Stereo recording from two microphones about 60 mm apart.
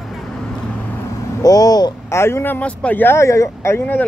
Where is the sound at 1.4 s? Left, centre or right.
Left.